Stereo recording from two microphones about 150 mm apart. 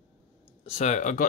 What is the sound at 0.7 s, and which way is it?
Speech, 50° left (ahead or behind).